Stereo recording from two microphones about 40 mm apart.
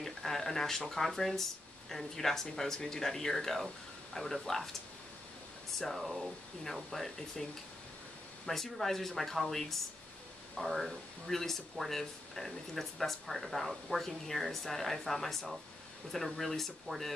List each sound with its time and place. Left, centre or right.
0.0 s speech: centre
5.8 s speech: centre
8.5 s speech: centre